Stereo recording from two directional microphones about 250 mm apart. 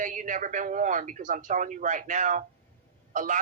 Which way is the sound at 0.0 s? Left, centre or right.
Right.